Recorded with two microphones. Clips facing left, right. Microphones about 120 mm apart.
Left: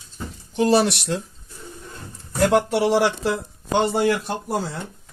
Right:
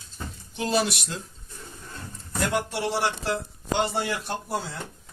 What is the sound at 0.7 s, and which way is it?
Speech, 65° left (ahead or behind).